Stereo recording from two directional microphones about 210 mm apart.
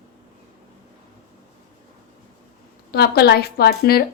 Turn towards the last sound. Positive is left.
turn(degrees=50)  # may be behind; listen again after turning